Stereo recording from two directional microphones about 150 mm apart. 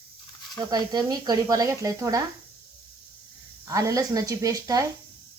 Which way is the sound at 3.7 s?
20° right (ahead or behind).